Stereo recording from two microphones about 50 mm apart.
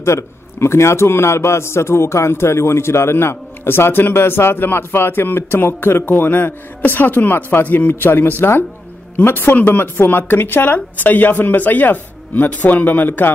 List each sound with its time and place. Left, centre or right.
0.0 s a man's voice: left
7.9 s a man's voice: left